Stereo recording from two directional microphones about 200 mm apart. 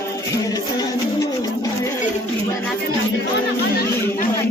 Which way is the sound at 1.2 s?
15° left (ahead or behind).